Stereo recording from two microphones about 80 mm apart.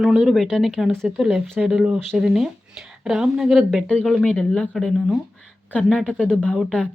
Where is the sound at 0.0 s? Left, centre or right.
Centre.